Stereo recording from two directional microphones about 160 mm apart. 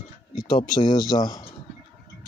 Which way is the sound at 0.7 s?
30° left (ahead or behind).